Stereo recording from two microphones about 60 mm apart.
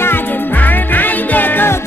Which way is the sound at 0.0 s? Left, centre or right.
Left.